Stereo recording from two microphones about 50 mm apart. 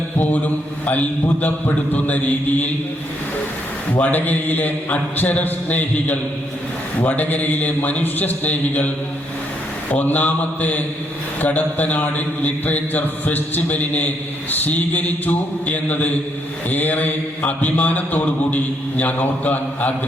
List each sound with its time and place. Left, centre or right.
0.9 s a man's voice: left
3.9 s a man's voice: left
9.9 s a man's voice: left